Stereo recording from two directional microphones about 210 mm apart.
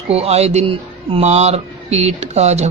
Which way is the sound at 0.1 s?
30° right (ahead or behind).